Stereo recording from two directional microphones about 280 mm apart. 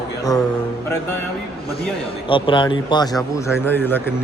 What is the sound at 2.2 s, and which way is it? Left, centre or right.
Speech, centre.